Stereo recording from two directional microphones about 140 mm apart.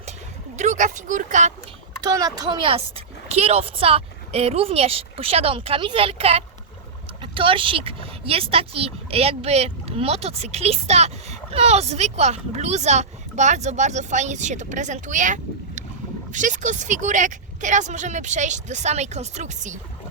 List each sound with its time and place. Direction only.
0.5 s speech: 60° right (ahead or behind)
2.0 s a woman's voice: 25° right (ahead or behind); by 19.7 s 55° right (ahead or behind)